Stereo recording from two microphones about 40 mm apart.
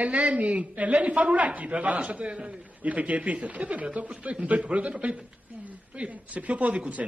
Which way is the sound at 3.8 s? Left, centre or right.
Right.